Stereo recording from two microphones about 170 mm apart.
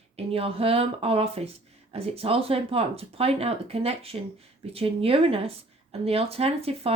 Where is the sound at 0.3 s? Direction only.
35° right (ahead or behind).